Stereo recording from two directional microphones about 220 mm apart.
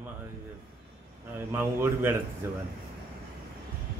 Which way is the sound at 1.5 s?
10° right (ahead or behind).